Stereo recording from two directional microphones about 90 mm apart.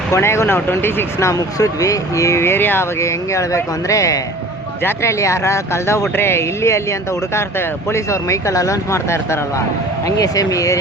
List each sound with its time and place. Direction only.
0.1 s speech: 30° left (ahead or behind)
7.9 s speech: 35° left (ahead or behind)